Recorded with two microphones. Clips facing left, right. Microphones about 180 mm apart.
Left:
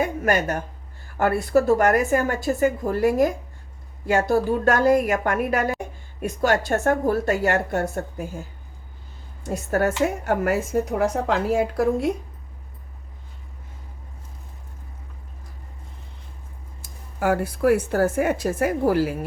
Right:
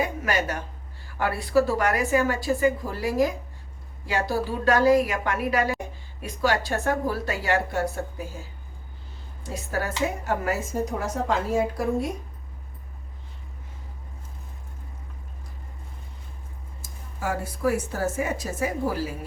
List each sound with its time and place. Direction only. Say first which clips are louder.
0.0 s a woman's voice: left 4 dB; 50° left (ahead or behind)
9.5 s speech: left 7 dB; 55° left (ahead or behind)
17.2 s speech: left 7 dB; 65° left (ahead or behind)